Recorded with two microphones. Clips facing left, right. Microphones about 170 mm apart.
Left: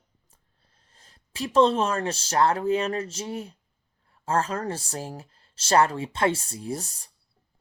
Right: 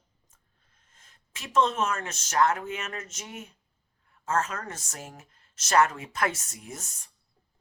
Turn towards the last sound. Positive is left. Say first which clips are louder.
# left 10 dB
turn(degrees=35)  # may be behind; listen again after turning